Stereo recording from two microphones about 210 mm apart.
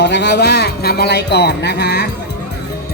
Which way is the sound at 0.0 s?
55° left (ahead or behind).